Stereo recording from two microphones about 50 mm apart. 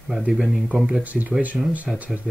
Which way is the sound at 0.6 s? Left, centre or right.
Right.